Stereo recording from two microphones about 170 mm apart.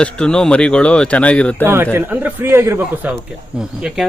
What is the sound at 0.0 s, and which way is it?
Speech, 5° left (ahead or behind).